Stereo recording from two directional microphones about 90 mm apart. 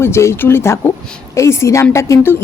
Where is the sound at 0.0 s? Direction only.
30° left (ahead or behind).